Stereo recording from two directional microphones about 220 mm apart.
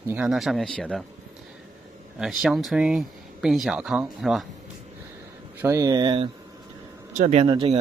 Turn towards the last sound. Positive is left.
turn(degrees=-20)  # may be behind; listen again after turning